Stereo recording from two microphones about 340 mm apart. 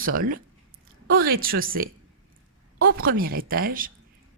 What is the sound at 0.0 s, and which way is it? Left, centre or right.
A woman's voice, right.